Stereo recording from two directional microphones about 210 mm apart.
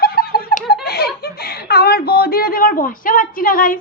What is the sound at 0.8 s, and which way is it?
Speech, 50° left (ahead or behind).